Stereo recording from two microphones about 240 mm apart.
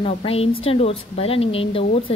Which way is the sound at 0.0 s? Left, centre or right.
Left.